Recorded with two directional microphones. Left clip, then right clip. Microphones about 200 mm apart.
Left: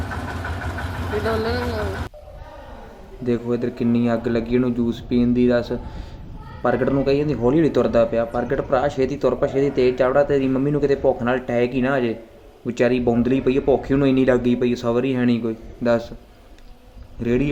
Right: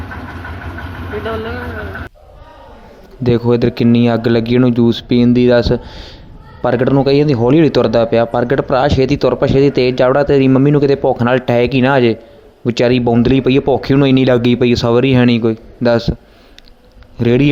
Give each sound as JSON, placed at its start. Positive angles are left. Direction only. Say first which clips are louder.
{"t": 1.1, "sound": "speech", "louder": "right 1 dB", "side_deg": 10}
{"t": 3.2, "sound": "speech", "louder": "right 10 dB", "side_deg": -40}
{"t": 17.2, "sound": "speech", "louder": "right 9 dB", "side_deg": -35}